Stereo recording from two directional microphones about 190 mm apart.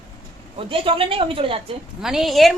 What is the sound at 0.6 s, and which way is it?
Speech, 30° right (ahead or behind).